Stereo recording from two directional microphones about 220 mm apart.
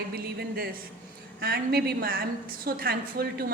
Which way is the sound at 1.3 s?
45° right (ahead or behind).